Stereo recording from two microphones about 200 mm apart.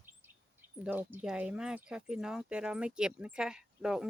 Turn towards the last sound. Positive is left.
turn(degrees=-5)  # may be behind; listen again after turning